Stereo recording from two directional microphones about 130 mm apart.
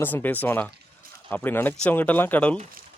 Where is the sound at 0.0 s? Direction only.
15° left (ahead or behind).